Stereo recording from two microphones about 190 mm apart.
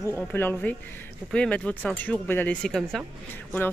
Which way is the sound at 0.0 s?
10° left (ahead or behind).